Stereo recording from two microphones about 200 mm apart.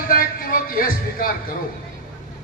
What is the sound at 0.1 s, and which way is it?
Music, 45° left (ahead or behind).